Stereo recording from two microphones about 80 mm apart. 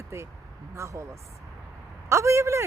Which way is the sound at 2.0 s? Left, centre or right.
Right.